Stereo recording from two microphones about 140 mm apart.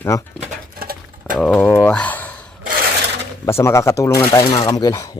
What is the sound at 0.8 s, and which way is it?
Sewing machine, 90° right.